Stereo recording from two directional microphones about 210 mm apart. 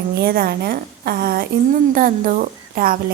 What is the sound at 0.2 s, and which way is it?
A woman's voice, 45° right (ahead or behind).